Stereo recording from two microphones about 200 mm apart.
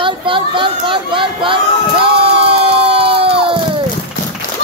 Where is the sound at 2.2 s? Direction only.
30° right (ahead or behind).